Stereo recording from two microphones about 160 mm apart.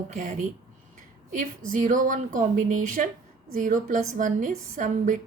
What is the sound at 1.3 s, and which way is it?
A woman's voice, 55° right (ahead or behind).